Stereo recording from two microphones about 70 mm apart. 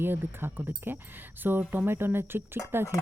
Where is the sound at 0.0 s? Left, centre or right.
Right.